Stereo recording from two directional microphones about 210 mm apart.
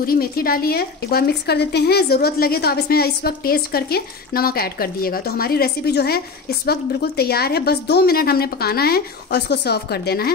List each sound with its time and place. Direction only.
0.0 s a woman's voice: 45° left (ahead or behind)